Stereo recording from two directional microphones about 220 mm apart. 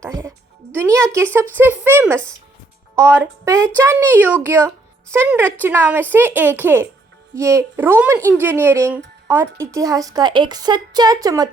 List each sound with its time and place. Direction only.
0.0 s a woman's voice: 15° right (ahead or behind)